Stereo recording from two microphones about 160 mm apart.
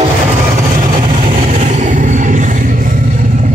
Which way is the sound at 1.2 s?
55° right (ahead or behind).